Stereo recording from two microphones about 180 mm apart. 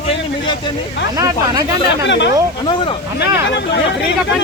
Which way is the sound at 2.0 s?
75° left (ahead or behind).